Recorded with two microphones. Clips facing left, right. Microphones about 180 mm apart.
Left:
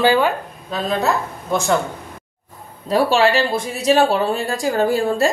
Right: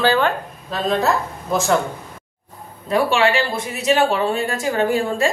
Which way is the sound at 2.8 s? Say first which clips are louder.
Left 2 dB; 35° left (ahead or behind).